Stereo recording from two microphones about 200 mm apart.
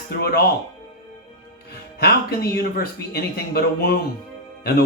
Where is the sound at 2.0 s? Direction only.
50° left (ahead or behind).